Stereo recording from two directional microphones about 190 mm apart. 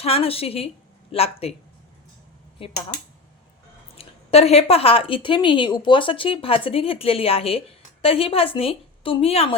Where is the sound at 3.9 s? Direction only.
30° left (ahead or behind).